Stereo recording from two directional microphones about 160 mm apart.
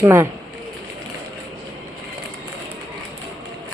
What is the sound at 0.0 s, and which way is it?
Speech, 15° right (ahead or behind).